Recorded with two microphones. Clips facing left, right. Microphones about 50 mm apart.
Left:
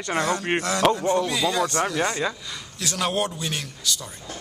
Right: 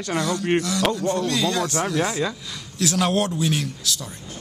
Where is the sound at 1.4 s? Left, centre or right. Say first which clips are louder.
Even; centre.